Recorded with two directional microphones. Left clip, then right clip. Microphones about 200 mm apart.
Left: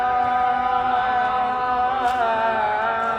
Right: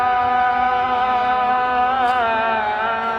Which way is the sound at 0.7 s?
30° left (ahead or behind).